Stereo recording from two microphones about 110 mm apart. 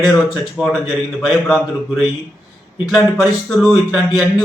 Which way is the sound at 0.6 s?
Centre (ahead or behind).